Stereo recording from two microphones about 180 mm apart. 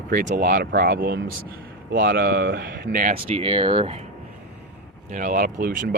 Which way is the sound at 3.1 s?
30° right (ahead or behind).